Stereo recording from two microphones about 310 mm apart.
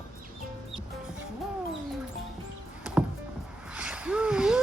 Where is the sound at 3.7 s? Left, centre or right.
Centre.